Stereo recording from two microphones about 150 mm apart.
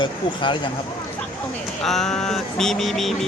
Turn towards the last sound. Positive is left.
turn(degrees=0)  # may be behind; listen again after turning